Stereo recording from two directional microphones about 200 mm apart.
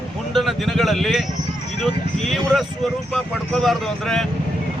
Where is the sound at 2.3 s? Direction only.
Centre (ahead or behind).